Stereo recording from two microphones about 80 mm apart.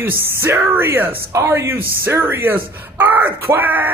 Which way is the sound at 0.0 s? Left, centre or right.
Right.